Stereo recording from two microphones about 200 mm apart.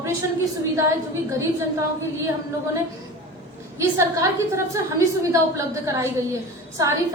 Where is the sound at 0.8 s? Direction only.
15° right (ahead or behind).